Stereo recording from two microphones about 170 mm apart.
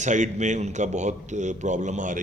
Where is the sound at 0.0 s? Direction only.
45° right (ahead or behind).